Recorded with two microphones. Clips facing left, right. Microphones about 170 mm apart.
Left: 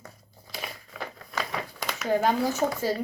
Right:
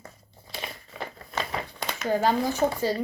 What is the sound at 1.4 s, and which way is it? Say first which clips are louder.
Crumpling: right 1 dB; 25° right (ahead or behind).